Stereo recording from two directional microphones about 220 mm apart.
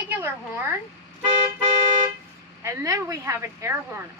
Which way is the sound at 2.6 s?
15° right (ahead or behind).